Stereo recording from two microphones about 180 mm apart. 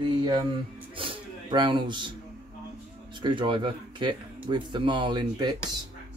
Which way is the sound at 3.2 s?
25° right (ahead or behind).